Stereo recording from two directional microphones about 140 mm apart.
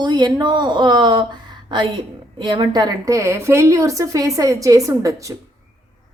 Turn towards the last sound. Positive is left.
turn(degrees=-25)  # may be behind; listen again after turning